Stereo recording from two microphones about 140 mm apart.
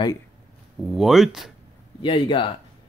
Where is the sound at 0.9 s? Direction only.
Centre (ahead or behind).